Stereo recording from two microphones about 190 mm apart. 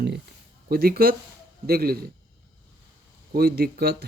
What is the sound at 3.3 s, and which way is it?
Speech, 55° right (ahead or behind).